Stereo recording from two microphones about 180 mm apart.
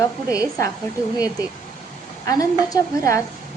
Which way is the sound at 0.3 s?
20° left (ahead or behind).